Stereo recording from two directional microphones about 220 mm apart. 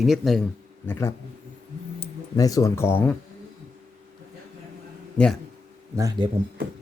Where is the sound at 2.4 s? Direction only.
15° left (ahead or behind).